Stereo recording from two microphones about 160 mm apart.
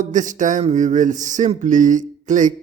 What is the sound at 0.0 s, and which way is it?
Speech, 50° right (ahead or behind).